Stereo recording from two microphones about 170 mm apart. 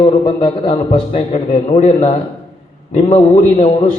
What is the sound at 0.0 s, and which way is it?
A man's voice, 35° left (ahead or behind).